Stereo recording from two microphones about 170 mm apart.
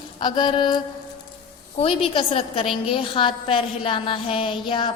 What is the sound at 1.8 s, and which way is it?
Speech, 35° left (ahead or behind).